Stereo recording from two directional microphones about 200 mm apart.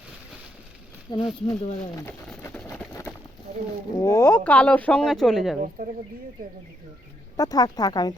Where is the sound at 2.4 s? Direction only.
10° left (ahead or behind).